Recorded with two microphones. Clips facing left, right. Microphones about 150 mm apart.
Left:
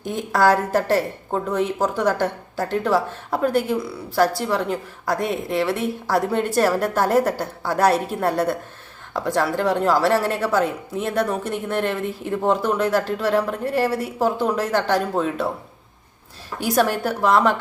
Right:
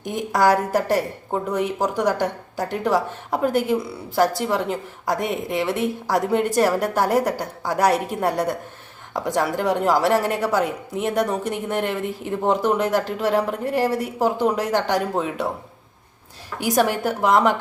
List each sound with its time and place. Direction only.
0.0 s a woman's voice: 15° right (ahead or behind)
16.6 s a woman's voice: 15° right (ahead or behind)